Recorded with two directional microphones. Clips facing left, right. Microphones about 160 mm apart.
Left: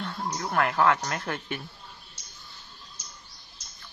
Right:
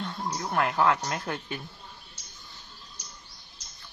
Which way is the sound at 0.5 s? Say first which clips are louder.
Left 1 dB; 20° right (ahead or behind).